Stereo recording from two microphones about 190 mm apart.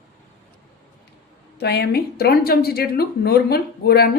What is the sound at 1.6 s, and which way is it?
A woman's voice, 60° left (ahead or behind).